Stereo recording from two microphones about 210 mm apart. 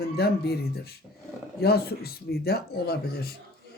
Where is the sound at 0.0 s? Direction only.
50° left (ahead or behind).